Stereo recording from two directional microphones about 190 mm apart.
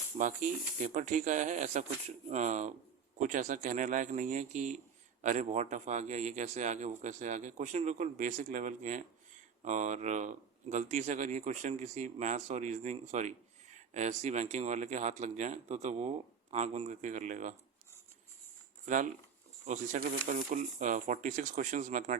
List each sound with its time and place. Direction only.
0.2 s speech: 45° right (ahead or behind)
18.9 s speech: 40° right (ahead or behind)